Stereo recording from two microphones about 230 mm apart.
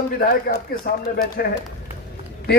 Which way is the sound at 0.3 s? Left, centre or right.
Left.